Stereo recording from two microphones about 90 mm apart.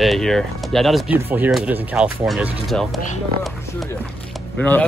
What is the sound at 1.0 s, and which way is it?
Speech, 20° right (ahead or behind).